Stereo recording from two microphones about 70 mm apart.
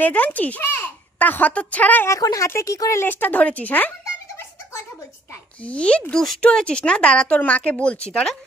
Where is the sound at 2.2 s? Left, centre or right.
Left.